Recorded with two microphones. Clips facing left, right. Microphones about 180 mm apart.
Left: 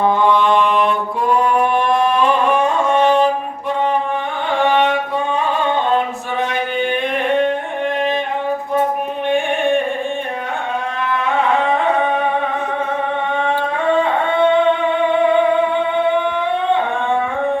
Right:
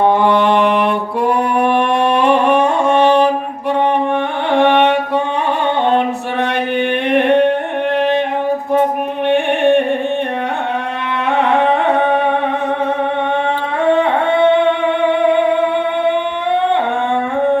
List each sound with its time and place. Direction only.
0.0 s music: 65° right (ahead or behind)
4.5 s music: 65° right (ahead or behind)
5.6 s a sound: 65° right (ahead or behind)
7.9 s singing: 65° right (ahead or behind)
9.2 s music: 65° right (ahead or behind)
11.3 s music: 65° right (ahead or behind)
14.0 s a sound: 65° right (ahead or behind)